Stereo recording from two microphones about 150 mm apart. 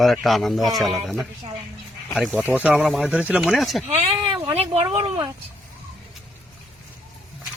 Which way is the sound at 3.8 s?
50° right (ahead or behind).